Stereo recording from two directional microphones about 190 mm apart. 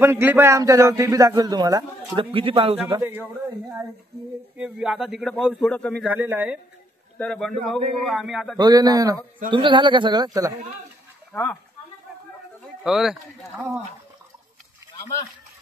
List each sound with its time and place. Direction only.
0.0 s a man's voice: 10° right (ahead or behind); by 3.0 s 30° right (ahead or behind)
3.0 s a man's voice: 10° right (ahead or behind)
4.6 s speech: 5° right (ahead or behind)
6.0 s a man's voice: 10° right (ahead or behind)
7.2 s speech: 5° left (ahead or behind)
8.5 s speech: 20° right (ahead or behind)
11.3 s speech: 15° left (ahead or behind)
12.8 s speech: centre (ahead or behind)